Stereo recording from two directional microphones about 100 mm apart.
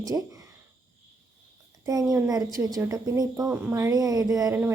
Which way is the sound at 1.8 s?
35° right (ahead or behind).